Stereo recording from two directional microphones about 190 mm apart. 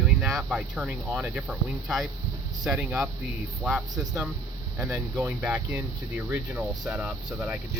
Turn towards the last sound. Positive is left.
turn(degrees=-10)  # may be behind; listen again after turning